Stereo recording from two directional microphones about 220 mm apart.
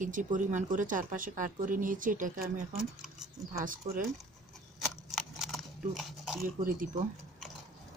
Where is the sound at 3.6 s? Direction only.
40° right (ahead or behind).